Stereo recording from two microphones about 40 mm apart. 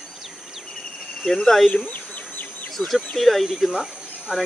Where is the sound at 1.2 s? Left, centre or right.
Centre.